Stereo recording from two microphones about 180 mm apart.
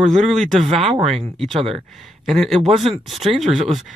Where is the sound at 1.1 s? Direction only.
35° right (ahead or behind).